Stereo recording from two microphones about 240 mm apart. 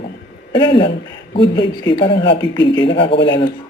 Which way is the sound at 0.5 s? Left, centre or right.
Centre.